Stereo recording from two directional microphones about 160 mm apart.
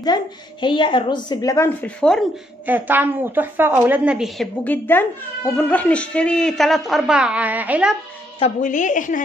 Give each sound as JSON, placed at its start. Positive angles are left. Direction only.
{"t": 0.0, "sound": "a woman's voice", "side_deg": 25}
{"t": 1.8, "sound": "speech", "side_deg": 5}
{"t": 2.6, "sound": "a woman's voice", "side_deg": -10}
{"t": 4.6, "sound": "a woman's voice", "side_deg": 10}
{"t": 8.5, "sound": "a woman's voice", "side_deg": 50}